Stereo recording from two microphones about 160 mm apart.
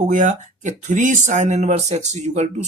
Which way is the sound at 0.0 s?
50° right (ahead or behind).